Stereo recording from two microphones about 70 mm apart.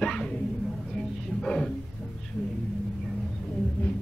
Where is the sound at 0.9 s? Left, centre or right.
Centre.